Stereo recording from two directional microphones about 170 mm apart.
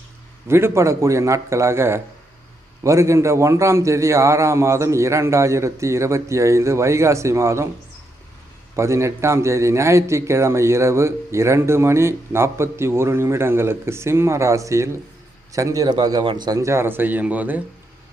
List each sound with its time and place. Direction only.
0.4 s a man's voice: 15° right (ahead or behind)
8.7 s a man's voice: 15° right (ahead or behind)